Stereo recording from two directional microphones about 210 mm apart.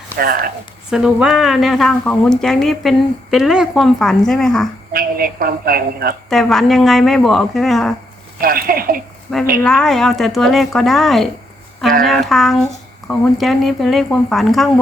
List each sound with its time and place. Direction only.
0.2 s a woman's voice: 45° right (ahead or behind)
0.9 s speech: 5° right (ahead or behind)
4.9 s a woman's voice: 45° right (ahead or behind)
6.3 s speech: centre (ahead or behind)
8.4 s a woman's voice: 45° right (ahead or behind)
9.3 s speech: centre (ahead or behind)
12.3 s speech: centre (ahead or behind)